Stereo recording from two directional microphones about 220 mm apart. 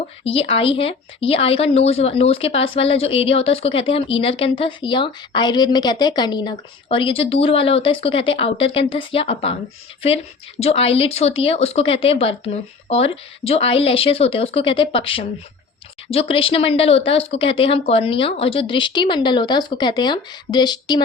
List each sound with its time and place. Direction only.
0.5 s a woman's voice: 25° left (ahead or behind)
10.6 s a woman's voice: 25° left (ahead or behind)